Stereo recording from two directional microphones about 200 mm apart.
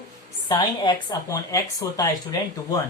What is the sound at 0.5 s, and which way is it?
Speech, 20° left (ahead or behind).